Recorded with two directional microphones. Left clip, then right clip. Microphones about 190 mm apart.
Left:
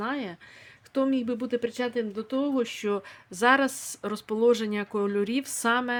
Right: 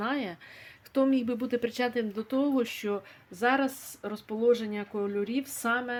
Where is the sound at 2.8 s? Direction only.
30° left (ahead or behind).